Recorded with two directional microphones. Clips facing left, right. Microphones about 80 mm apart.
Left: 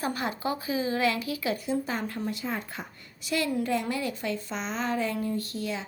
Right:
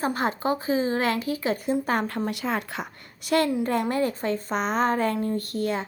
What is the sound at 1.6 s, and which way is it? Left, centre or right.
Speech, right.